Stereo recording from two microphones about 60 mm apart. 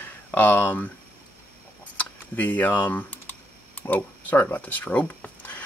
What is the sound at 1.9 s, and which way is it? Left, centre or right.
Computer keyboard, left.